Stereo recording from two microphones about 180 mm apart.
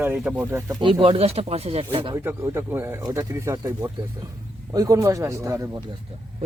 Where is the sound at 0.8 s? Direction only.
30° right (ahead or behind).